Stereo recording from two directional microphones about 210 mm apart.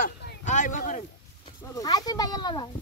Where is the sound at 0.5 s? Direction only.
40° left (ahead or behind).